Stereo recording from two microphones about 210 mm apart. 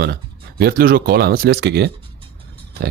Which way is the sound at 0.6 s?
50° right (ahead or behind).